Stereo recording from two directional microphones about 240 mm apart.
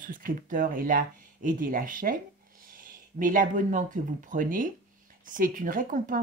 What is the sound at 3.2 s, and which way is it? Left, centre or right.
Speech, right.